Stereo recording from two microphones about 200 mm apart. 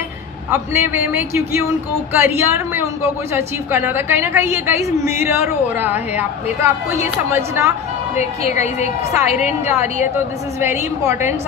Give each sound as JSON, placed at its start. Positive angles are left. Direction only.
{"t": 0.5, "sound": "a woman's voice", "side_deg": -10}
{"t": 7.3, "sound": "a woman's voice", "side_deg": -15}
{"t": 8.2, "sound": "a woman's voice", "side_deg": 35}
{"t": 10.6, "sound": "a woman's voice", "side_deg": -10}